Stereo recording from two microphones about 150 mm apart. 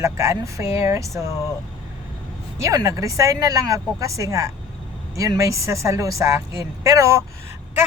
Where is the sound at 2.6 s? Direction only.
20° right (ahead or behind).